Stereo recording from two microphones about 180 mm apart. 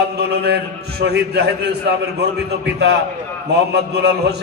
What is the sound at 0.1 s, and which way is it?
A man's voice, 65° right (ahead or behind).